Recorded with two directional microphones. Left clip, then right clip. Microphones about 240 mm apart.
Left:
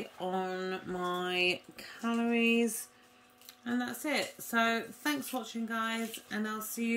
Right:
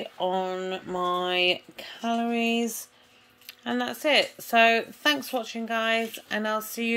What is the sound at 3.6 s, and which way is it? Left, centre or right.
Speech, centre.